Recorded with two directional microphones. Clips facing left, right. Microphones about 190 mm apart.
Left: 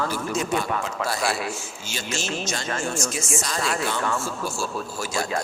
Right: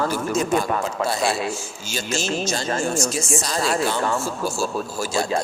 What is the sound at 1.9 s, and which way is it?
A man's voice, 40° right (ahead or behind).